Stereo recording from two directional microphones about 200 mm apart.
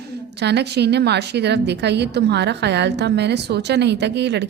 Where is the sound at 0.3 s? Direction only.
55° right (ahead or behind).